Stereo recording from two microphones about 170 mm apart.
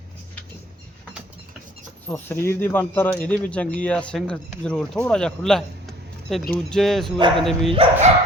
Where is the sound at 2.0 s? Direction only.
10° left (ahead or behind).